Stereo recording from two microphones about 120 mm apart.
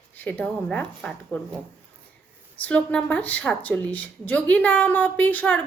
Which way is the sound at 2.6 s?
10° left (ahead or behind).